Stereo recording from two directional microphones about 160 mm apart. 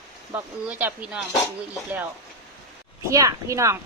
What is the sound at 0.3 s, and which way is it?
Speech, 10° right (ahead or behind).